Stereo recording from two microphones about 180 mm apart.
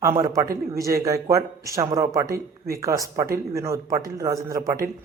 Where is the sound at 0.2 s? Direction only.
20° right (ahead or behind).